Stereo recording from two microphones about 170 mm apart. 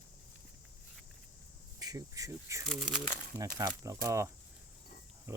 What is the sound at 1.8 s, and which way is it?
Speech, 20° right (ahead or behind).